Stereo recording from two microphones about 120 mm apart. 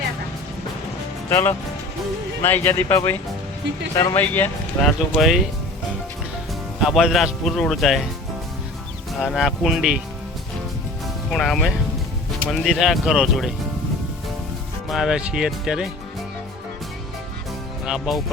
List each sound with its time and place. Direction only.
1.3 s speech: 20° left (ahead or behind)
4.2 s speech: 15° left (ahead or behind)
4.9 s a man's voice: centre (ahead or behind)
6.8 s a man's voice: centre (ahead or behind)
9.1 s a man's voice: centre (ahead or behind)
11.3 s a man's voice: centre (ahead or behind)
14.8 s a man's voice: 5° right (ahead or behind)
17.8 s a man's voice: 5° right (ahead or behind)